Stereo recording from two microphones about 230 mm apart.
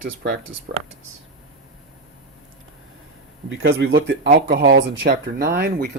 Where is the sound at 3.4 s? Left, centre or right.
Right.